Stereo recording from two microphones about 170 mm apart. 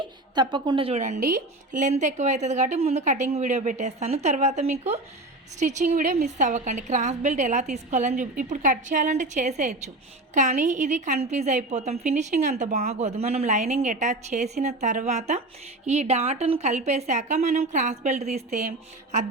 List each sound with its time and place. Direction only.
0.0 s a woman's voice: 25° right (ahead or behind)